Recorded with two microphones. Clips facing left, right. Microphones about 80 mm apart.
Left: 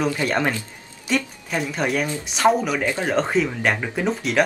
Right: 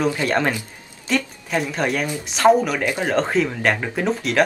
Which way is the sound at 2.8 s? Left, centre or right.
Centre.